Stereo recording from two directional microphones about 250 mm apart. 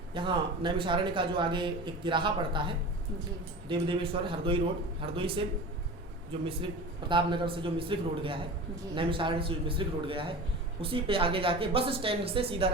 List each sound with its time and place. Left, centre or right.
0.1 s speech: centre